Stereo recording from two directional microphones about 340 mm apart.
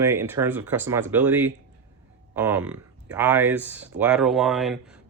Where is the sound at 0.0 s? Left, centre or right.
Centre.